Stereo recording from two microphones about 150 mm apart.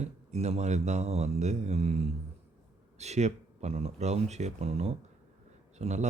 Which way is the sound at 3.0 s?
50° right (ahead or behind).